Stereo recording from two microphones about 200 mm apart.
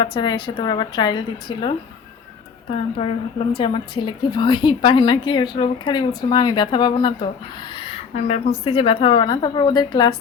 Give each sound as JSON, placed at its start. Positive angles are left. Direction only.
{"t": 0.1, "sound": "a woman's voice", "side_deg": 20}